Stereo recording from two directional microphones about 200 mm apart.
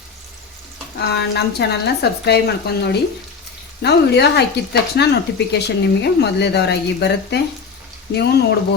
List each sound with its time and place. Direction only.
0.9 s a woman's voice: 55° left (ahead or behind)